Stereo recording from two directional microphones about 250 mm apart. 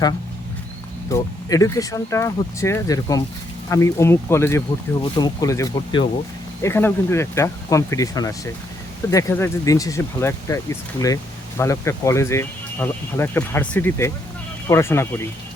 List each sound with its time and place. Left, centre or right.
1.1 s speech: centre